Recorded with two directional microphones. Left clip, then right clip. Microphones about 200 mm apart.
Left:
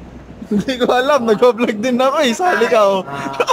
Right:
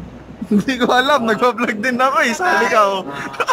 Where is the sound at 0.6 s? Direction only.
Centre (ahead or behind).